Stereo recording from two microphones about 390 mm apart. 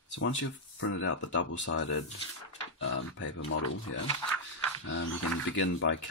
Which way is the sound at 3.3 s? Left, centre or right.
Left.